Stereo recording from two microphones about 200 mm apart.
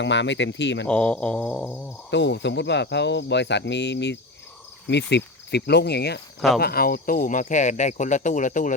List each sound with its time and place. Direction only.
0.0 s speech: 65° left (ahead or behind)
0.9 s a sound: 5° left (ahead or behind)
2.0 s speech: 60° left (ahead or behind); by 8.7 s 40° left (ahead or behind)